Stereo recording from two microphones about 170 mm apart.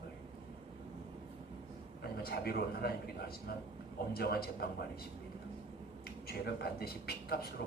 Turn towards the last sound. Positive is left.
turn(degrees=65)  # may be behind; listen again after turning